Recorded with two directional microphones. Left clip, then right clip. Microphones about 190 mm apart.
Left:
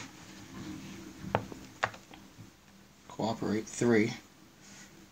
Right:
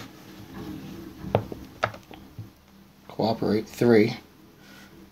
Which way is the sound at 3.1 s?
Centre (ahead or behind).